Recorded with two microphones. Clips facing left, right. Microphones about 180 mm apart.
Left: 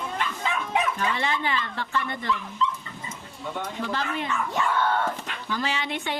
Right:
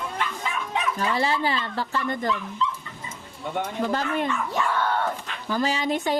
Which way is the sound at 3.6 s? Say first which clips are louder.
Right 4 dB; 45° right (ahead or behind).